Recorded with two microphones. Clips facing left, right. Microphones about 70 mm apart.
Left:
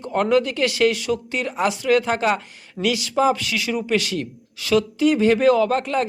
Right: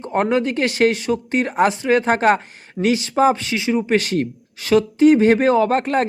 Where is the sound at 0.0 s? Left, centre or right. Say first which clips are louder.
Even; right.